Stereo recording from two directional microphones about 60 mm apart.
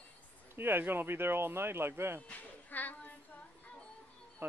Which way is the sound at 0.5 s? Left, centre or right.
Right.